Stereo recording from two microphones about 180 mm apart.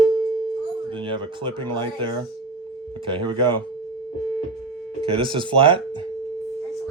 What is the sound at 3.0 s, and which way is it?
Speech, 25° right (ahead or behind).